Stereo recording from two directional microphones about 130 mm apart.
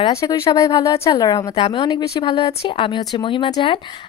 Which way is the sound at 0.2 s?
25° left (ahead or behind).